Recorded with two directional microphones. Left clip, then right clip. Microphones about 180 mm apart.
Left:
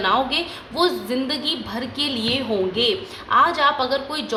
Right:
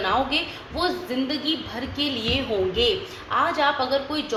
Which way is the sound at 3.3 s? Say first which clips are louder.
Left 5 dB; 30° left (ahead or behind).